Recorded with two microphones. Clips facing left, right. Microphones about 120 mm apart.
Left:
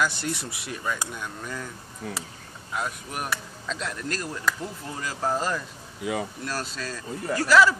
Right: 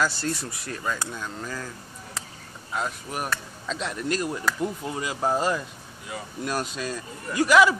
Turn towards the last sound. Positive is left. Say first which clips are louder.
# right 1 dB
turn(degrees=-15)  # may be behind; listen again after turning